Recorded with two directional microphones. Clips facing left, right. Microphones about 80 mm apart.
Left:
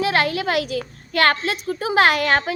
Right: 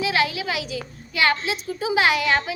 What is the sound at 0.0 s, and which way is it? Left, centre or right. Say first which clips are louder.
A child's voice: left 3 dB; left.